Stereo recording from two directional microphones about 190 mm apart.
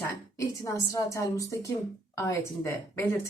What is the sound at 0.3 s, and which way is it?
Speech, 15° left (ahead or behind).